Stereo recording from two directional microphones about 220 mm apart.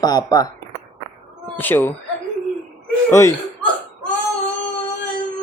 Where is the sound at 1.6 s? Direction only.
10° left (ahead or behind).